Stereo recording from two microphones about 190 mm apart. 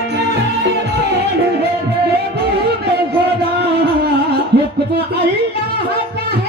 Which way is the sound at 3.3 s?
60° right (ahead or behind).